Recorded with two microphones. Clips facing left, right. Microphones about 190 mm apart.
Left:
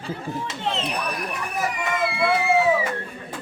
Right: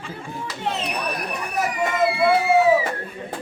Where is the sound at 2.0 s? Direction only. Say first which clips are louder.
Right 5 dB; 25° right (ahead or behind).